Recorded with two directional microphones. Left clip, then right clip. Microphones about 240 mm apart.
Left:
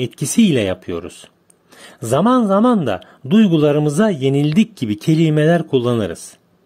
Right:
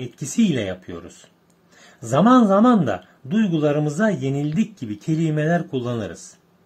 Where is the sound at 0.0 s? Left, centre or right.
Left.